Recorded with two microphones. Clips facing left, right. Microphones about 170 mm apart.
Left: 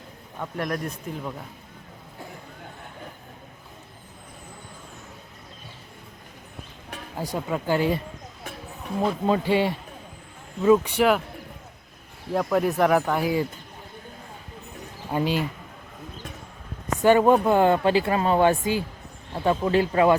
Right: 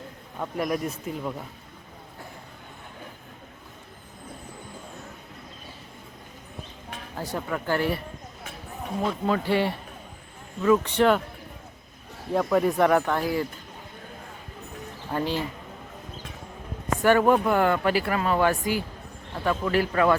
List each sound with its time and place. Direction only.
0.3 s speech: 5° right (ahead or behind)
7.2 s speech: 15° left (ahead or behind)
9.2 s speech: 20° left (ahead or behind)
10.9 s speech: 5° left (ahead or behind)
12.3 s speech: centre (ahead or behind)
15.1 s speech: 15° left (ahead or behind)
17.0 s speech: 20° left (ahead or behind)